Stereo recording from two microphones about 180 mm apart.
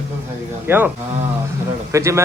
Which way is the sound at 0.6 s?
10° right (ahead or behind).